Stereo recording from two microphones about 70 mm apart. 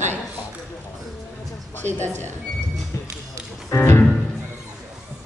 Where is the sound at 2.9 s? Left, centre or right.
Left.